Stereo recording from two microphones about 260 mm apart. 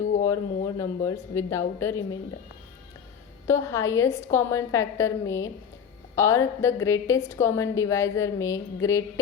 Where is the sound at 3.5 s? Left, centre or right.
Centre.